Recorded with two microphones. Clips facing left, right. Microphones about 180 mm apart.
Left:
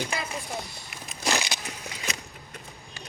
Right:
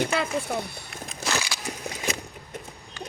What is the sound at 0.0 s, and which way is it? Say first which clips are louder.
Speech: right 7 dB; 65° right (ahead or behind).